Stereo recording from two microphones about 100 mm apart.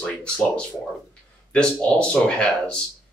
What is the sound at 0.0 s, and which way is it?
Speech, 10° left (ahead or behind).